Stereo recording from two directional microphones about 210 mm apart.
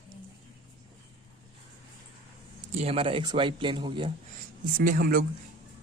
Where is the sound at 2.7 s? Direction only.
30° right (ahead or behind).